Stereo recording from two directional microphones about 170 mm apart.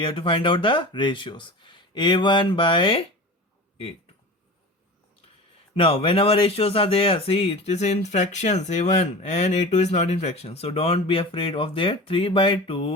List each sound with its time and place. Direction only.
0.0 s speech: 30° left (ahead or behind)
5.7 s speech: 30° left (ahead or behind)